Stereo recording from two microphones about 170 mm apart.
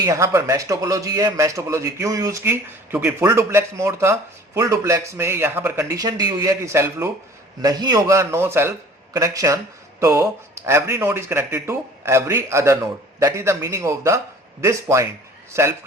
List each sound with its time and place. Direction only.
0.0 s a man's voice: 20° right (ahead or behind)